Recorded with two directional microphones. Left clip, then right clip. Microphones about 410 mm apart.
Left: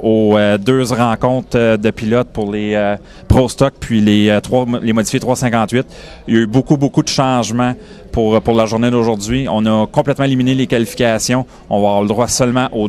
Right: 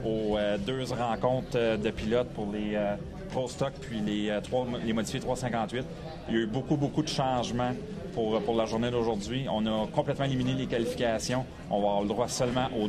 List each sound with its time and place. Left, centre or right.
0.0 s speech: left
2.5 s speech: left